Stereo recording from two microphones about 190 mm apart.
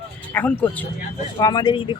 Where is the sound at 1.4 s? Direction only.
25° left (ahead or behind).